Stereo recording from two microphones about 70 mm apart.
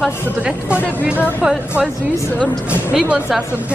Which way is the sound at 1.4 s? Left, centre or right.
Centre.